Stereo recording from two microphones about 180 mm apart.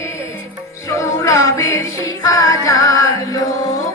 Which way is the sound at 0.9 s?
15° left (ahead or behind).